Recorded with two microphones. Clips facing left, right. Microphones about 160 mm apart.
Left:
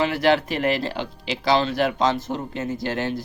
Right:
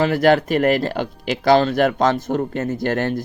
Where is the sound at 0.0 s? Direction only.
45° right (ahead or behind).